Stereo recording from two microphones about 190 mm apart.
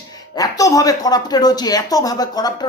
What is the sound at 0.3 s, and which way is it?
Speech, 20° left (ahead or behind).